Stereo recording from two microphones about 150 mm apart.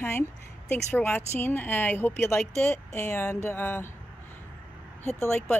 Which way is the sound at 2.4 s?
5° left (ahead or behind).